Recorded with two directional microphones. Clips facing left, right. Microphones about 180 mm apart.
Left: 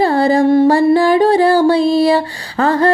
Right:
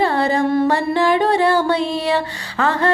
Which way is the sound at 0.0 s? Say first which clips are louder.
Left 5 dB; 35° left (ahead or behind).